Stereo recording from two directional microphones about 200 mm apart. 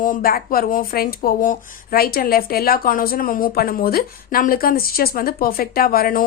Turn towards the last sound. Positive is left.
turn(degrees=45)  # may be behind; listen again after turning